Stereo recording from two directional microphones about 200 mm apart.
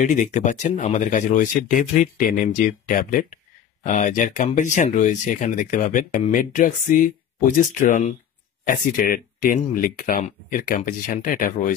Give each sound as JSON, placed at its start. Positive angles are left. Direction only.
{"t": 0.0, "sound": "speech", "side_deg": 40}